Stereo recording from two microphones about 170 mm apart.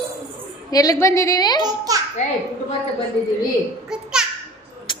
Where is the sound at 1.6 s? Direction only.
20° right (ahead or behind).